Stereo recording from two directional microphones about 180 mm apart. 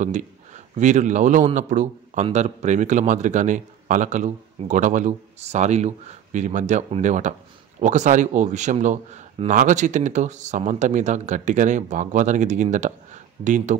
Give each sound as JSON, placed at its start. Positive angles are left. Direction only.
{"t": 0.0, "sound": "a man's voice", "side_deg": -45}